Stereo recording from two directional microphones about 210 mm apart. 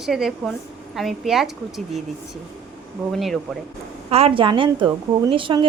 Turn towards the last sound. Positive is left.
turn(degrees=-25)  # may be behind; listen again after turning